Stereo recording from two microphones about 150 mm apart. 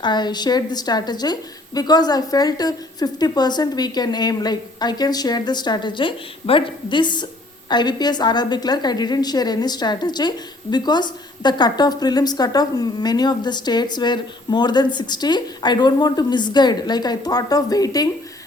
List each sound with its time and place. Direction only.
0.0 s a woman's voice: 30° left (ahead or behind)